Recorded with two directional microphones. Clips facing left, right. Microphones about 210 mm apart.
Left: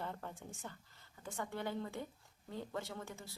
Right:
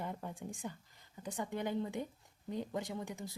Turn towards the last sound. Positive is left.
turn(degrees=-15)  # may be behind; listen again after turning